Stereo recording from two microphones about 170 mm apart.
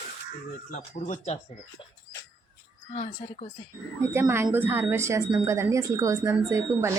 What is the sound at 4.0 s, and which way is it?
A woman's voice, 15° right (ahead or behind).